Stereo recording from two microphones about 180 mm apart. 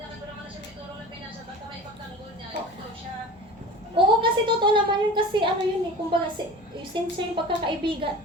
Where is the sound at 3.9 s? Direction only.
25° right (ahead or behind).